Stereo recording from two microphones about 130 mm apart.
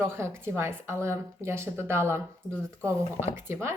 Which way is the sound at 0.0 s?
20° right (ahead or behind).